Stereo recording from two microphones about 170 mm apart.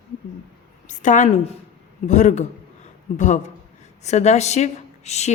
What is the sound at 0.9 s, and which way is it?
A woman's voice, 45° left (ahead or behind).